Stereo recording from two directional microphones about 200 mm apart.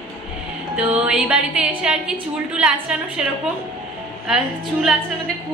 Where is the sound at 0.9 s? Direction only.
5° right (ahead or behind).